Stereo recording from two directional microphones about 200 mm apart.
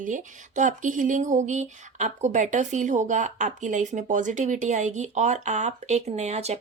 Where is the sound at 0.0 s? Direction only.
40° right (ahead or behind).